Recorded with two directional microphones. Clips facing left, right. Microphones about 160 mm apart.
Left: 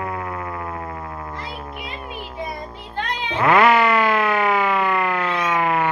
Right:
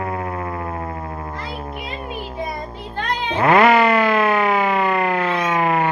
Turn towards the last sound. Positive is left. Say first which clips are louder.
# right 2 dB
turn(degrees=-35)  # may be behind; listen again after turning